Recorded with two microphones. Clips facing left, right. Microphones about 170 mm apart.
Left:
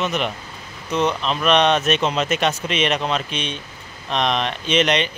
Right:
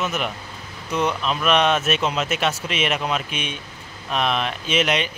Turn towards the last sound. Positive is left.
turn(degrees=-5)  # may be behind; listen again after turning